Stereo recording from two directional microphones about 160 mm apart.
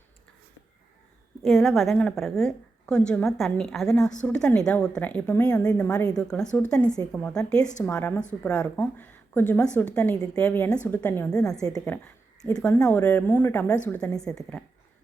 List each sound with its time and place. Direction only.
1.5 s a woman's voice: centre (ahead or behind)
5.9 s a woman's voice: 20° left (ahead or behind)
6.1 s a woman's voice: 5° left (ahead or behind)